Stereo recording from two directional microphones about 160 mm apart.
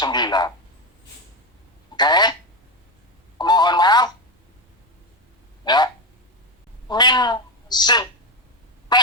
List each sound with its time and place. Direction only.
0.0 s a sound: 25° left (ahead or behind)
2.0 s speech: 25° left (ahead or behind)
3.3 s telephone: 25° left (ahead or behind)
5.6 s a sound: 25° left (ahead or behind)
6.8 s a woman's voice: 25° left (ahead or behind)
8.9 s quack: 25° left (ahead or behind)